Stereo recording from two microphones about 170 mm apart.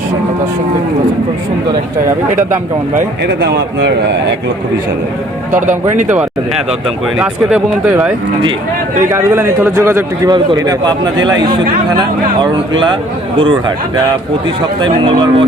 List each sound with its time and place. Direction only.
3.2 s a man's voice: 80° right
7.2 s a man's voice: 5° right (ahead or behind); by 13.0 s 25° right (ahead or behind)
14.8 s speech: 30° right (ahead or behind)